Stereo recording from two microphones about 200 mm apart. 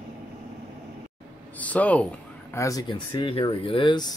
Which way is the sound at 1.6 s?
5° left (ahead or behind).